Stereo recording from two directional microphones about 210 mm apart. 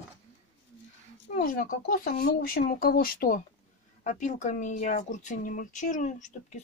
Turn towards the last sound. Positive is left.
turn(degrees=35)  # may be behind; listen again after turning